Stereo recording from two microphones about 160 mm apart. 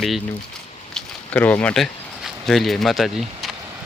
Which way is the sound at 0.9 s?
10° left (ahead or behind).